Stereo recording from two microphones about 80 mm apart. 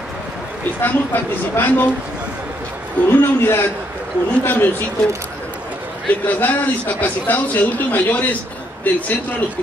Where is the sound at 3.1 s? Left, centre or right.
Left.